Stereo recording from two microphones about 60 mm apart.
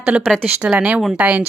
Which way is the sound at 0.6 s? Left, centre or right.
Centre.